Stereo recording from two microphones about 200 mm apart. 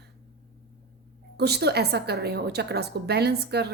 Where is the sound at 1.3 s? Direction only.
55° right (ahead or behind).